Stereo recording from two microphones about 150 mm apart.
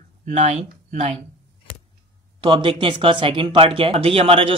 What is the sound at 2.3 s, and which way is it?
Speech, 35° right (ahead or behind).